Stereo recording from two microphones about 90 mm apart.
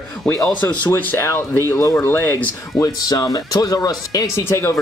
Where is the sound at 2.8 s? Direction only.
45° left (ahead or behind).